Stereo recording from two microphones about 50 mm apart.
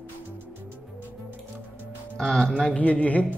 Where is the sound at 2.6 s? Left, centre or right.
Left.